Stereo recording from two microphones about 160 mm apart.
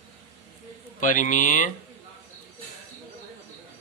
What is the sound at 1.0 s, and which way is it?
Speech, 55° left (ahead or behind).